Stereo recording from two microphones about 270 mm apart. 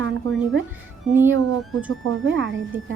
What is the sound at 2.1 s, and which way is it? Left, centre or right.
Speech, right.